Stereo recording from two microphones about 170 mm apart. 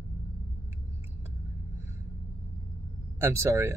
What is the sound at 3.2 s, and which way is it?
Speech, 15° right (ahead or behind).